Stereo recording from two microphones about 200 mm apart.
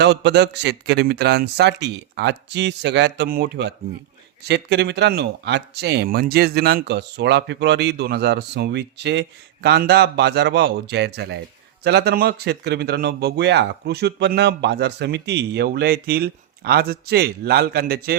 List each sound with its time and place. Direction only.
0.0 s speech: 60° right (ahead or behind)